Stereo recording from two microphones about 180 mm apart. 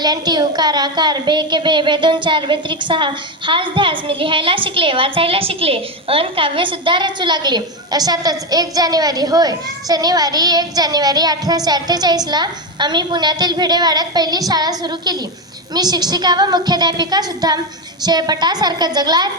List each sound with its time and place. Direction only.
0.0 s a woman's voice: 25° right (ahead or behind)